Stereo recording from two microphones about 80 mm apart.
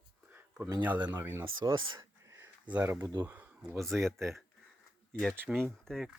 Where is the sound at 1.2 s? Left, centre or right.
Right.